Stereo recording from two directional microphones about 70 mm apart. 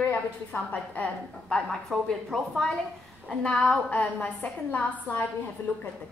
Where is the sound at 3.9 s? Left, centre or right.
Left.